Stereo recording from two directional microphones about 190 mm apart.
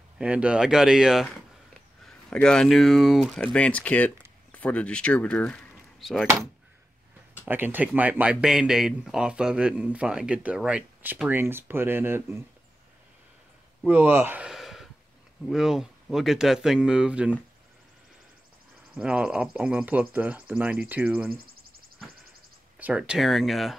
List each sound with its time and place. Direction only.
0.2 s speech: 5° right (ahead or behind)
7.4 s speech: 10° right (ahead or behind)
13.8 s speech: 10° right (ahead or behind)
18.9 s speech: 5° right (ahead or behind)
22.8 s speech: 5° right (ahead or behind)